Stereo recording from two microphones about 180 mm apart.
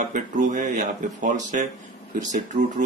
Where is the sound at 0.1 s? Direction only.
45° right (ahead or behind).